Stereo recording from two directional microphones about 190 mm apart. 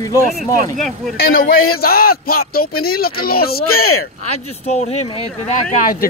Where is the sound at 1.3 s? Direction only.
50° left (ahead or behind).